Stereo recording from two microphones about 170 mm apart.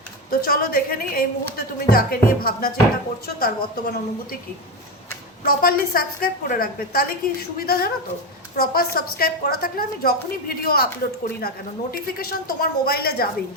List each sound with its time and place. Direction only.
0.3 s a woman's voice: 60° left (ahead or behind)
5.5 s a woman's voice: 60° left (ahead or behind)